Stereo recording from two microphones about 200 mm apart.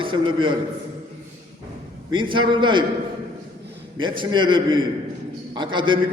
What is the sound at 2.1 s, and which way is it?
Speech, 25° right (ahead or behind).